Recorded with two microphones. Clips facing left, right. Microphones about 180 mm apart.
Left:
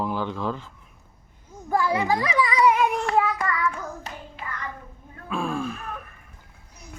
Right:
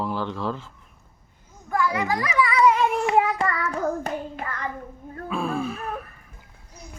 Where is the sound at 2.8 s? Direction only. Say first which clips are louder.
Right 1 dB; centre (ahead or behind).